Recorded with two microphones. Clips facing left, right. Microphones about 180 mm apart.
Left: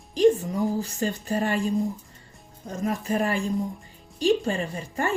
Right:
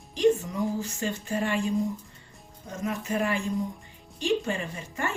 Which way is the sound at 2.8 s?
35° left (ahead or behind).